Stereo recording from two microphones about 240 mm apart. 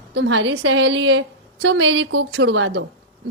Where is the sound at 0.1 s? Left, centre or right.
Right.